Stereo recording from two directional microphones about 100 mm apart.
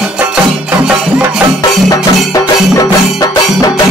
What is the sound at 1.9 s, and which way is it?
Music, 35° left (ahead or behind).